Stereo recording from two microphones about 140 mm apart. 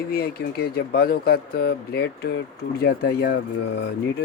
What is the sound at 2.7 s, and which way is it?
Speech, 90° left.